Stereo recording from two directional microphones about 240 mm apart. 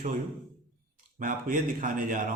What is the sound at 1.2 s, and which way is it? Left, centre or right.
A man's voice, right.